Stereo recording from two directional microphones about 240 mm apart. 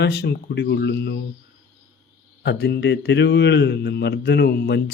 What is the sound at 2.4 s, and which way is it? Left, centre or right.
A man's voice, left.